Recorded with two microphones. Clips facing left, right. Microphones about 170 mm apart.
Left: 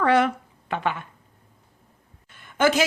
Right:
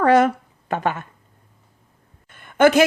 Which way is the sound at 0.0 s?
40° right (ahead or behind).